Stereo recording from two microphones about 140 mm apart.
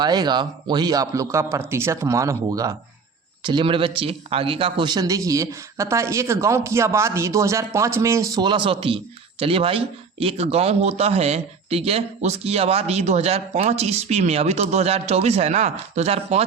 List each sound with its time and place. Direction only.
0.0 s speech: 30° right (ahead or behind)
3.4 s speech: 35° right (ahead or behind)